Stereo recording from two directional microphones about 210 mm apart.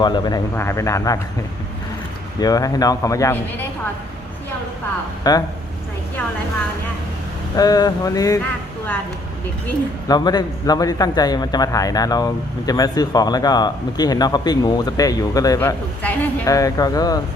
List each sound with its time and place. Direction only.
0.0 s a man's voice: 20° left (ahead or behind)
2.4 s a man's voice: 15° left (ahead or behind)
5.2 s a woman's voice: 20° left (ahead or behind)
7.5 s a man's voice: 15° left (ahead or behind)
10.1 s a man's voice: 20° left (ahead or behind)